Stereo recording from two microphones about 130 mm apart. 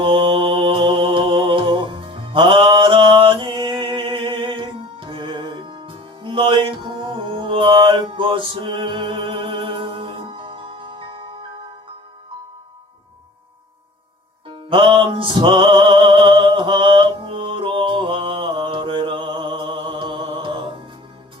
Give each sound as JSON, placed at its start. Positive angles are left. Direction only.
{"t": 0.0, "sound": "music", "side_deg": -40}
{"t": 14.4, "sound": "music", "side_deg": -40}